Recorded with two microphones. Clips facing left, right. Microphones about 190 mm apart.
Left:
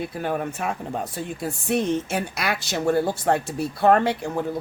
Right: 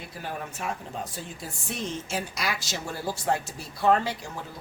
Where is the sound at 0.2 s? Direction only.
55° left (ahead or behind).